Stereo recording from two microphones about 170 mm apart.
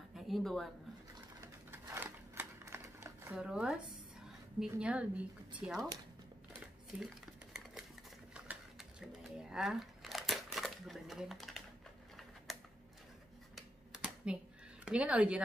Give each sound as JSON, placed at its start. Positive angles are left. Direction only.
{"t": 0.1, "sound": "a sound", "side_deg": 0}
{"t": 1.7, "sound": "typewriter", "side_deg": -15}
{"t": 3.3, "sound": "speech", "side_deg": -5}
{"t": 6.9, "sound": "speech", "side_deg": -10}
{"t": 8.5, "sound": "a sound", "side_deg": -5}
{"t": 12.5, "sound": "typewriter", "side_deg": 0}
{"t": 14.2, "sound": "speech", "side_deg": -5}